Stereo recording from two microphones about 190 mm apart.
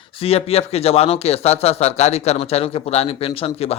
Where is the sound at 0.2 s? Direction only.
30° left (ahead or behind).